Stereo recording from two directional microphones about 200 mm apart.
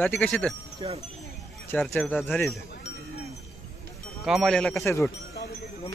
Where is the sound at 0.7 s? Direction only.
30° right (ahead or behind).